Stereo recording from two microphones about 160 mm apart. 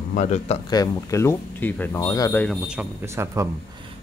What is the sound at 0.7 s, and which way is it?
Speech, 20° left (ahead or behind).